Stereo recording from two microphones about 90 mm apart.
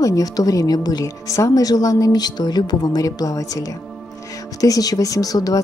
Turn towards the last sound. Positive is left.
turn(degrees=45)  # may be behind; listen again after turning